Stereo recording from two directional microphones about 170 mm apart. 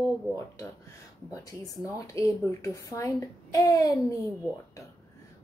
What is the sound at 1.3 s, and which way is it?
Speech, 20° left (ahead or behind).